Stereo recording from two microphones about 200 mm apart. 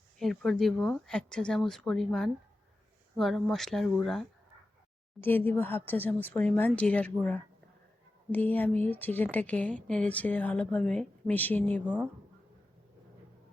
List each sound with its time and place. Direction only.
0.2 s speech: centre (ahead or behind)